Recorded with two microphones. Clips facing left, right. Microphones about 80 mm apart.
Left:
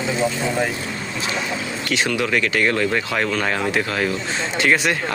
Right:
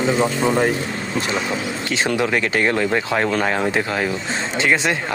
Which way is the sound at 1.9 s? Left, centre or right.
Right.